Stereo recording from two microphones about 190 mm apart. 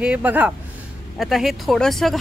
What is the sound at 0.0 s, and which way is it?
A woman's voice, 5° right (ahead or behind).